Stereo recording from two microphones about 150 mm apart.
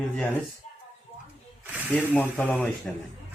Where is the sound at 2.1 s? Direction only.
10° left (ahead or behind).